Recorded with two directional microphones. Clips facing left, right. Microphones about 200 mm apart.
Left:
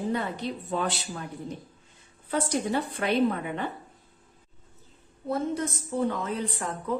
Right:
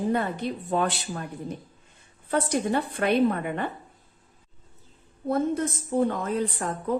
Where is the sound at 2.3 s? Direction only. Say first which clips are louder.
Right 2 dB; 55° right (ahead or behind).